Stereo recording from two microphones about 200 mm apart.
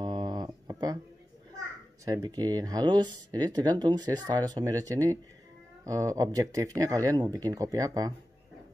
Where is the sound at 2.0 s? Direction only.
20° right (ahead or behind).